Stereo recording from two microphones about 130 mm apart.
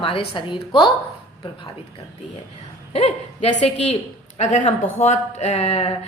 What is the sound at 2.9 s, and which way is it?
Speech, 50° left (ahead or behind).